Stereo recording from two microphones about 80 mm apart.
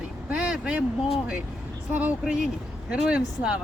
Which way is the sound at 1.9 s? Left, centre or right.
Centre.